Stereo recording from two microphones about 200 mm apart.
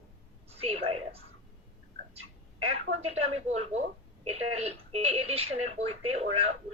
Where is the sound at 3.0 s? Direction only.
30° right (ahead or behind).